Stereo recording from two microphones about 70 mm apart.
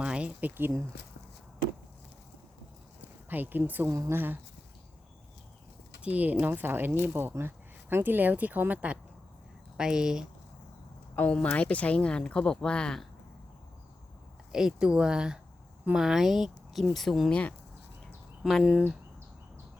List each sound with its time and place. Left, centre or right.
0.0 s speech: centre
3.2 s speech: right
3.8 s a woman's voice: right
4.1 s speech: right
6.0 s speech: right
9.7 s speech: centre
11.1 s speech: left
14.5 s speech: centre
18.6 s speech: centre